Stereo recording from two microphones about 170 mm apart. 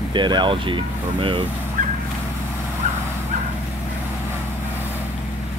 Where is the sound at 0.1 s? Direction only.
25° right (ahead or behind).